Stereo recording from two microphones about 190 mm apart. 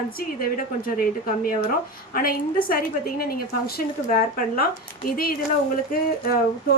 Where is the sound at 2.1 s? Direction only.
50° left (ahead or behind).